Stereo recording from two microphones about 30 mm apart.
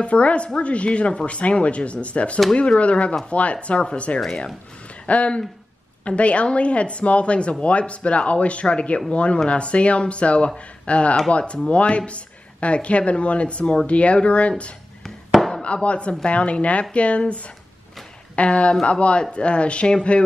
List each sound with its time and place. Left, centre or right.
0.0 s speech: left
3.5 s speech: left
15.6 s speech: left
18.3 s speech: left